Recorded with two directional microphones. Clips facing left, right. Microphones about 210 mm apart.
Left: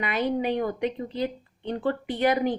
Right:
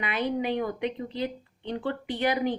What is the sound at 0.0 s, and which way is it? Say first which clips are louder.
Speech: left 2 dB; 40° left (ahead or behind).